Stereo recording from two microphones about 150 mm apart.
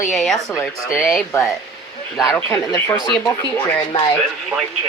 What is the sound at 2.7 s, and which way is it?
Speech, 25° left (ahead or behind).